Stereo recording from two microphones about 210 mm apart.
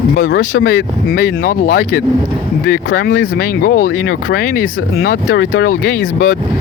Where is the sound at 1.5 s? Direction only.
45° left (ahead or behind).